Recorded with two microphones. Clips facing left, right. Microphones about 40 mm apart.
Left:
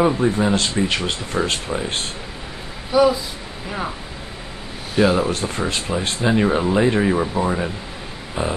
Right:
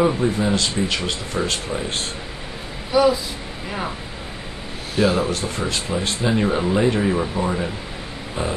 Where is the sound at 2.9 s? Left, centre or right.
Centre.